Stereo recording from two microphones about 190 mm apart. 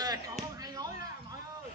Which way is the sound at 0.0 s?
20° right (ahead or behind).